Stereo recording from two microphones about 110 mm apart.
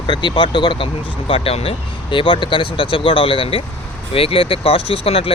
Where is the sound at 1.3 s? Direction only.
60° left (ahead or behind).